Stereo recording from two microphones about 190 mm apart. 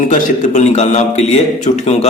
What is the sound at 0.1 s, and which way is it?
A man's voice, 40° left (ahead or behind).